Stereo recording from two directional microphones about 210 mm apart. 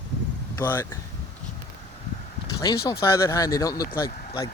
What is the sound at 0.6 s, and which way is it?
Speech, 10° left (ahead or behind).